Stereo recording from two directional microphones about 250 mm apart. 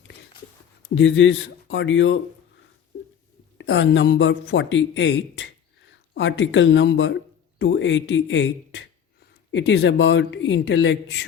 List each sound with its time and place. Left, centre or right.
0.9 s speech: left
3.6 s speech: left